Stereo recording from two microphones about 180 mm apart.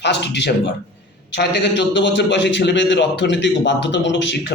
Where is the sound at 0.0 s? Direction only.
75° left (ahead or behind).